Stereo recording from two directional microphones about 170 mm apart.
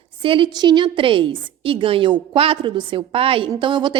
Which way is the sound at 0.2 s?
30° right (ahead or behind).